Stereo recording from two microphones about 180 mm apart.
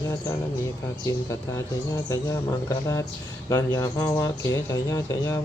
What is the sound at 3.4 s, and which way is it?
Speech, 20° left (ahead or behind).